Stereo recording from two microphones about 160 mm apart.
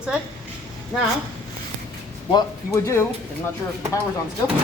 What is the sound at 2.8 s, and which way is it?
Speech, 15° left (ahead or behind).